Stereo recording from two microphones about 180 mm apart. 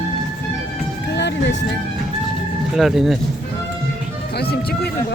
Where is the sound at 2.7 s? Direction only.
Centre (ahead or behind).